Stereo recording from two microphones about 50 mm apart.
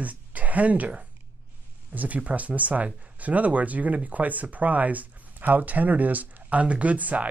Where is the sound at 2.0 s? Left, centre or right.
Right.